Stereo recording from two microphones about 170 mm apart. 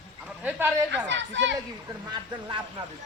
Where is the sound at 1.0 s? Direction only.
90° right.